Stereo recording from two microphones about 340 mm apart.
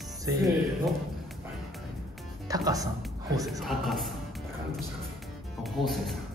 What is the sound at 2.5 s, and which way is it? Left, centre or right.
Speech, centre.